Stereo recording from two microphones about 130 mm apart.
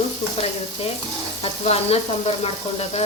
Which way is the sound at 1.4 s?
50° left (ahead or behind).